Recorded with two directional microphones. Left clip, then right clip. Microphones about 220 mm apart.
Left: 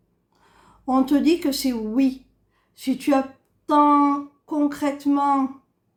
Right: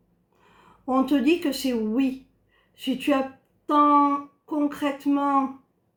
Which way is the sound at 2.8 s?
55° left (ahead or behind).